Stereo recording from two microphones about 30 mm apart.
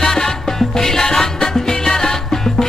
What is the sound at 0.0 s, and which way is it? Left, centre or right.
Music, centre.